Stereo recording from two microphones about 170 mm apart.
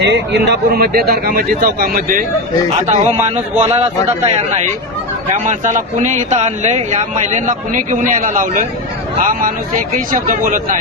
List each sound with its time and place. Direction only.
0.0 s speech: 75° right (ahead or behind); by 2.2 s 55° right (ahead or behind)
2.8 s speech: 40° right (ahead or behind)
5.3 s speech: 45° right (ahead or behind)